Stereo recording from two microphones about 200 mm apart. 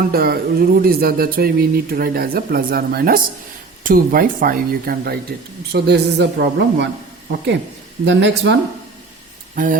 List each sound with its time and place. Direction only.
0.0 s speech: 50° right (ahead or behind)
8.0 s speech: 65° right (ahead or behind)
9.6 s speech: 45° right (ahead or behind)